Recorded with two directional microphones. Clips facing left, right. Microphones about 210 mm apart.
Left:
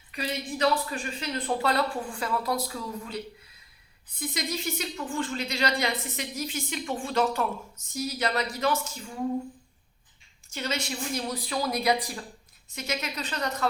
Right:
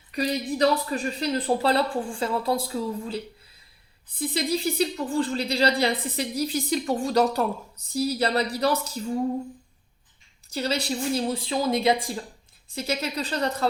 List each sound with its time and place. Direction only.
0.1 s speech: 40° right (ahead or behind)
4.2 s speech: 30° right (ahead or behind)
10.5 s speech: 35° right (ahead or behind)